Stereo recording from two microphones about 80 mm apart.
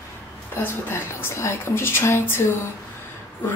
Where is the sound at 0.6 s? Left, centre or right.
Left.